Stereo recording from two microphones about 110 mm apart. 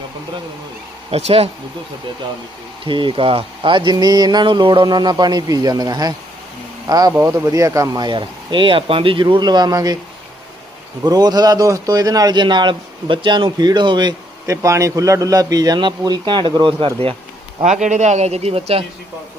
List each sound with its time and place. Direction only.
1.1 s speech: 65° right (ahead or behind)
2.8 s speech: 50° right (ahead or behind)
11.0 s speech: 40° right (ahead or behind)
14.4 s speech: 30° right (ahead or behind); by 17.2 s 55° right (ahead or behind)
17.7 s a man's voice: 90° right; by 18.9 s 60° right (ahead or behind)